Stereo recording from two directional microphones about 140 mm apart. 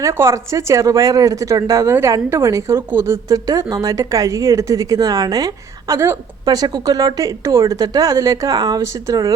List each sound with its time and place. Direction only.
0.0 s speech: 20° right (ahead or behind)